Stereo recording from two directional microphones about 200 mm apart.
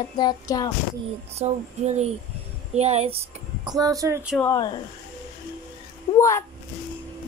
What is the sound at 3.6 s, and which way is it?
Speech, 15° right (ahead or behind).